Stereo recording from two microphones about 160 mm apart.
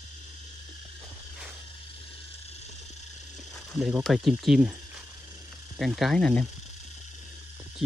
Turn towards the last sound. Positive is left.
turn(degrees=0)  # may be behind; listen again after turning